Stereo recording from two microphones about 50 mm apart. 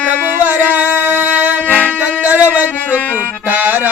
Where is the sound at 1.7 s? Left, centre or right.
Left.